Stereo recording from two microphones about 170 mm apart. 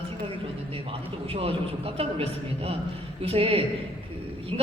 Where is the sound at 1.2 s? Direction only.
35° right (ahead or behind).